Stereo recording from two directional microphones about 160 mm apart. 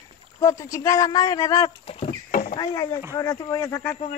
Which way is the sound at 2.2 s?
55° left (ahead or behind).